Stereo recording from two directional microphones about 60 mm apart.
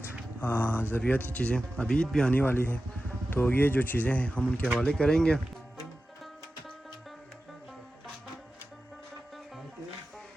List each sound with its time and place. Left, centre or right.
0.3 s speech: left; by 2.3 s centre
2.3 s speech: left; by 5.4 s centre